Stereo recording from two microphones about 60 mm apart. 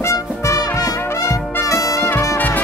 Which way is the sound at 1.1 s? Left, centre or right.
Left.